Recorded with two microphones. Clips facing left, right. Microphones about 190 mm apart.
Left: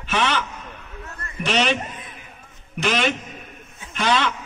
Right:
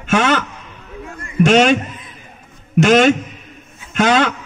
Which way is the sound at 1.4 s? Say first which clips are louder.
Right 9 dB; 45° right (ahead or behind).